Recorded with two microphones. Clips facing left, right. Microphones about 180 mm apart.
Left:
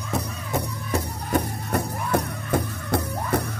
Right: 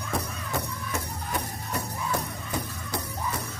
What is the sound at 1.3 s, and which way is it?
Music, 60° left (ahead or behind).